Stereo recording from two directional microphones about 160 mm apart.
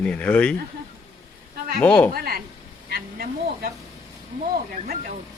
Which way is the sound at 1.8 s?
10° left (ahead or behind).